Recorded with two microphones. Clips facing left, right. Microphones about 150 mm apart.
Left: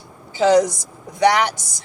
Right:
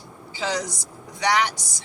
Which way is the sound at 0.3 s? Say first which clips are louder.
Left 13 dB; 50° left (ahead or behind).